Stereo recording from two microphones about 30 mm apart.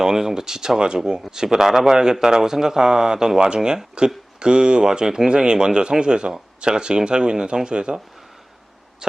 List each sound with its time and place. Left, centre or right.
0.0 s a man's voice: centre